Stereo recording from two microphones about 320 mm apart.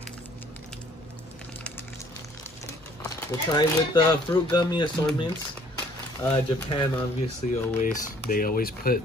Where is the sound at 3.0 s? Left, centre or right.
Centre.